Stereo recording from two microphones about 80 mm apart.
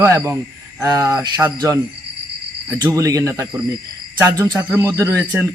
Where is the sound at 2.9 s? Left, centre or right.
Right.